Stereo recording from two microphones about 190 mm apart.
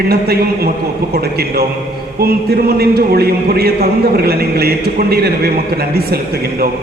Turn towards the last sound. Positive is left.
turn(degrees=-55)  # may be behind; listen again after turning